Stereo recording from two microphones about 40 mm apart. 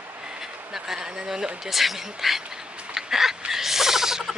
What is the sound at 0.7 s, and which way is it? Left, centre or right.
Speech, centre.